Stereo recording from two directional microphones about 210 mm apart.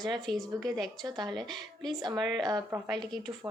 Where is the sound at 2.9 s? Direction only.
Centre (ahead or behind).